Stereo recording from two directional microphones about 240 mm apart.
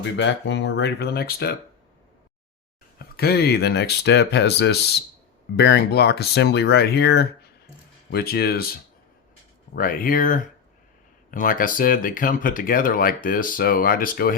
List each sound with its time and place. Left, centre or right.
0.2 s speech: left
3.2 s speech: left